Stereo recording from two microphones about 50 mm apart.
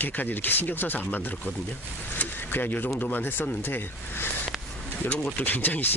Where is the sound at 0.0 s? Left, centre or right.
Left.